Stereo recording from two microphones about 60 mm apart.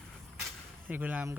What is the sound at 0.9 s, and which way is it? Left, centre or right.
Speech, right.